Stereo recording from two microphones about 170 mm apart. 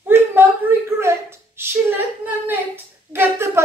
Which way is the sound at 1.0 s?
15° right (ahead or behind).